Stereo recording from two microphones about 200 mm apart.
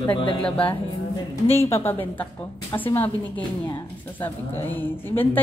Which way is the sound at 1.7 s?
10° left (ahead or behind).